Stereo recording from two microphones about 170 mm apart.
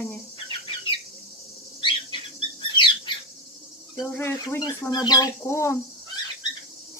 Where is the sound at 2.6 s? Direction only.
30° left (ahead or behind).